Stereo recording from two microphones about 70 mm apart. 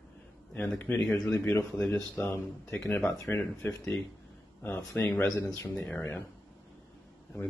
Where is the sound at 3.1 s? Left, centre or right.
Left.